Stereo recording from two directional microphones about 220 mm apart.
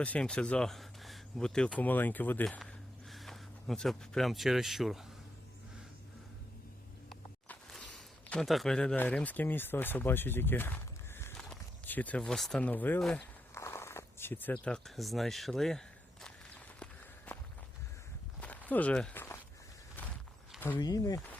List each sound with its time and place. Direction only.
0.0 s speech: 5° left (ahead or behind)
7.1 s speech: 5° left (ahead or behind)
18.3 s walk: 5° left (ahead or behind)
20.6 s speech: 10° left (ahead or behind)